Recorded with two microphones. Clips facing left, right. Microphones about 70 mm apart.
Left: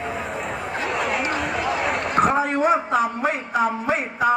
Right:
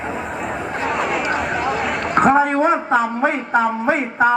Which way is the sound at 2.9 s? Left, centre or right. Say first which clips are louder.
Right 4 dB; right.